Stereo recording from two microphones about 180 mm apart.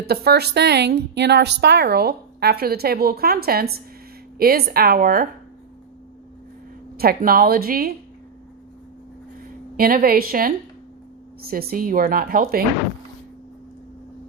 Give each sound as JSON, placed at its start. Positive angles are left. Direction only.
{"t": 0.0, "sound": "a woman's voice", "side_deg": -60}
{"t": 6.9, "sound": "a woman's voice", "side_deg": -55}
{"t": 9.7, "sound": "a woman's voice", "side_deg": -55}